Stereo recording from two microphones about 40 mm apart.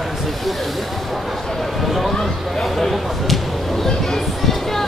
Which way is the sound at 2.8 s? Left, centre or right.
Centre.